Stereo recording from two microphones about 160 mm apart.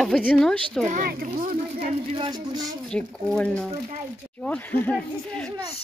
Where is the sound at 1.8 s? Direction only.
35° right (ahead or behind).